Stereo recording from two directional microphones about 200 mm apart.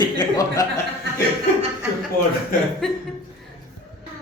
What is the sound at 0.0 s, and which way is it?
Chuckle, 20° left (ahead or behind).